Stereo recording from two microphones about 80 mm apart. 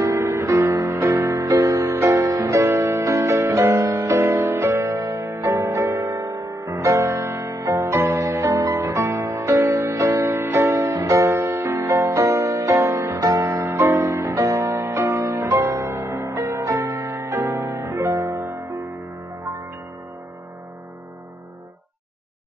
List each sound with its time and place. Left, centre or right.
0.0 s music: right
7.4 s music: right
7.8 s music: right
9.6 s music: right